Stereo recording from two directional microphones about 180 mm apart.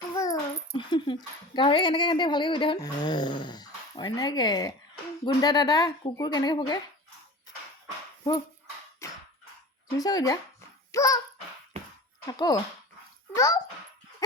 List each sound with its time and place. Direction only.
0.1 s a child's voice: 20° left (ahead or behind)
9.0 s dog: 15° left (ahead or behind)
10.0 s speech: 20° left (ahead or behind)
12.3 s a child's voice: 20° left (ahead or behind)